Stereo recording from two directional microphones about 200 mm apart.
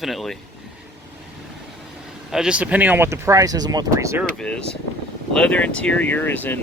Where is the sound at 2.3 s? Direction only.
5° right (ahead or behind).